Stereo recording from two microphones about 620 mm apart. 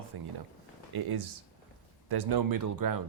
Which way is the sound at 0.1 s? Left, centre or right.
Right.